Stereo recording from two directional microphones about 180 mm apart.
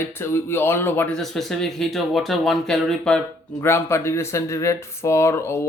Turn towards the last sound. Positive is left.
turn(degrees=15)  # may be behind; listen again after turning